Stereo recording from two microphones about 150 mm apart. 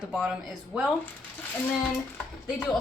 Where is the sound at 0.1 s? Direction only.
5° right (ahead or behind).